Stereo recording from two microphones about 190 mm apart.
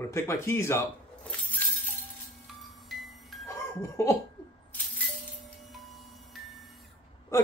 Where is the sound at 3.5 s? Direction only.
15° left (ahead or behind).